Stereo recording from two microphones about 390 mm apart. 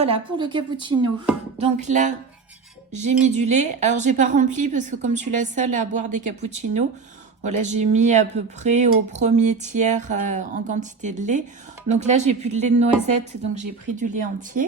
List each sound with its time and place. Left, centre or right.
0.0 s a woman's voice: centre